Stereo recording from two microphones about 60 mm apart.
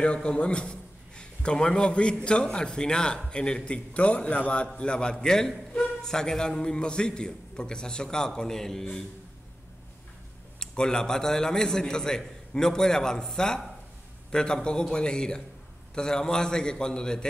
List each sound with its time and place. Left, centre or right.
0.0 s a man's voice: centre
10.6 s a man's voice: centre